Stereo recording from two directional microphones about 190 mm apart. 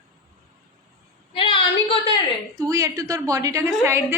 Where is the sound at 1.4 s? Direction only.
25° left (ahead or behind).